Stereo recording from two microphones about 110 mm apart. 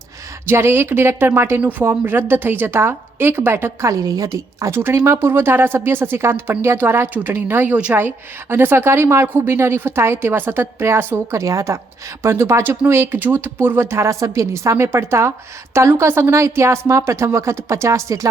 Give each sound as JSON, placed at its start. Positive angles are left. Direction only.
{"t": 0.4, "sound": "speech", "side_deg": -20}